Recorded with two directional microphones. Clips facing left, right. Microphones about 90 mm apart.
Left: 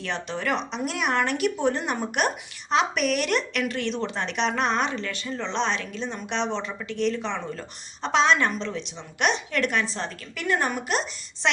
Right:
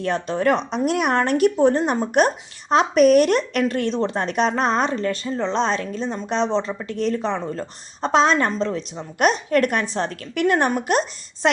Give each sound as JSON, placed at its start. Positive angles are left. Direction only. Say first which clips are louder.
{"t": 0.0, "sound": "a woman's voice", "louder": "right 9 dB", "side_deg": -40}